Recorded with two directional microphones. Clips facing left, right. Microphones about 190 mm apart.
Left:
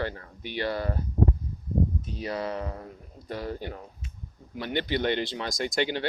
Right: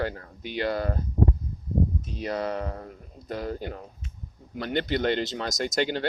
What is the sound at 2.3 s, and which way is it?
Speech, 45° right (ahead or behind).